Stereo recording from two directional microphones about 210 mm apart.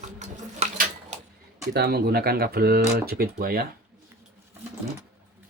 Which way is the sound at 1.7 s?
50° right (ahead or behind).